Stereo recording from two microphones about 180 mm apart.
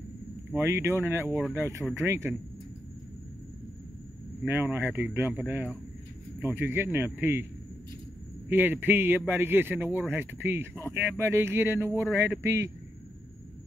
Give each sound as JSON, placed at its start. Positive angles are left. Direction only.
{"t": 0.6, "sound": "speech", "side_deg": -15}
{"t": 4.5, "sound": "speech", "side_deg": -10}
{"t": 8.5, "sound": "speech", "side_deg": -10}